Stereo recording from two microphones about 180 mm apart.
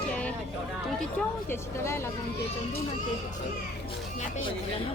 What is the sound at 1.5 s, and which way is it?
Speech, 15° left (ahead or behind).